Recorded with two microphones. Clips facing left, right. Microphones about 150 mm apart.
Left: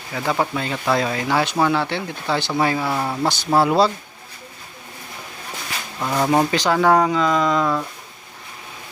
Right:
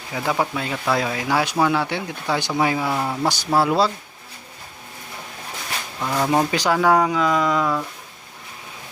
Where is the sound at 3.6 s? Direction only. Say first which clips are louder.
Left 3 dB; centre (ahead or behind).